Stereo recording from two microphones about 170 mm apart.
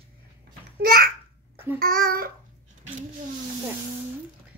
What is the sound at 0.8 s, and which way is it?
A child's voice, 60° right (ahead or behind).